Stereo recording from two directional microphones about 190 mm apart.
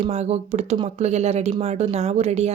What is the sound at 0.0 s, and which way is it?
Speech, 35° right (ahead or behind).